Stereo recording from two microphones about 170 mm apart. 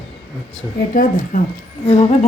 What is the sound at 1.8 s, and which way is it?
Speech, 35° left (ahead or behind).